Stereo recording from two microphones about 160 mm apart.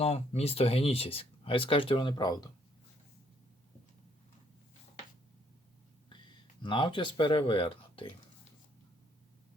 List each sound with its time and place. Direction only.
0.0 s speech: 40° left (ahead or behind); by 2.5 s 25° left (ahead or behind)
6.6 s speech: 30° left (ahead or behind)